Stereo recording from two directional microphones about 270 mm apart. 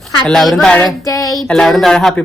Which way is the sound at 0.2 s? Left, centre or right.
Centre.